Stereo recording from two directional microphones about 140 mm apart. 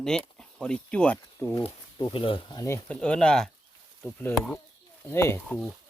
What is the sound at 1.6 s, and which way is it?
Speech, 35° left (ahead or behind).